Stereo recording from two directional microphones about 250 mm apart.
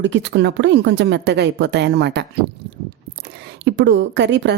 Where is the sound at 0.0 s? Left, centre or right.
Right.